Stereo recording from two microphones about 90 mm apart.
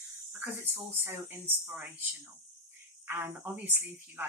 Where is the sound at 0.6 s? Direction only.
25° right (ahead or behind).